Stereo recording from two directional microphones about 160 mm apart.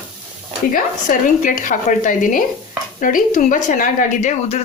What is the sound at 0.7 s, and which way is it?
Speech, 55° left (ahead or behind).